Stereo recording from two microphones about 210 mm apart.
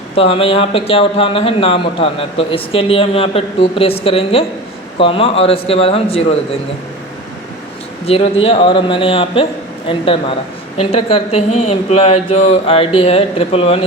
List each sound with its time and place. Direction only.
0.2 s speech: 25° left (ahead or behind)
8.0 s speech: 30° left (ahead or behind)